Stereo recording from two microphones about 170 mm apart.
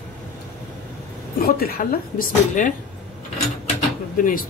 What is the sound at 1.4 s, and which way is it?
Speech, 60° left (ahead or behind).